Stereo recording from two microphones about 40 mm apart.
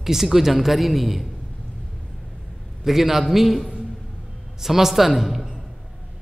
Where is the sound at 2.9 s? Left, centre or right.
Centre.